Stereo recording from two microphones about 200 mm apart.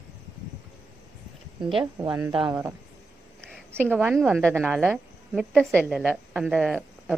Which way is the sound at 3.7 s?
5° right (ahead or behind).